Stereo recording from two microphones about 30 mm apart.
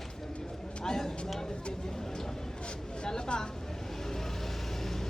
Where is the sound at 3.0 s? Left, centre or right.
Left.